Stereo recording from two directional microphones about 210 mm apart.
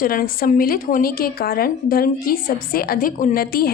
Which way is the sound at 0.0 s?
45° left (ahead or behind).